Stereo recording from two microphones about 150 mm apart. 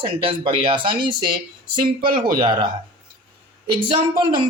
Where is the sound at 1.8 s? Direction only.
75° right (ahead or behind).